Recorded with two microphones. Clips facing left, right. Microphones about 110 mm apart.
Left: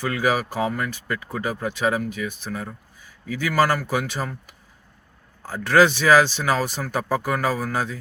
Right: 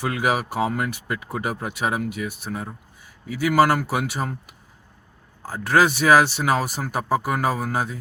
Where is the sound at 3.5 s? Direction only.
20° right (ahead or behind).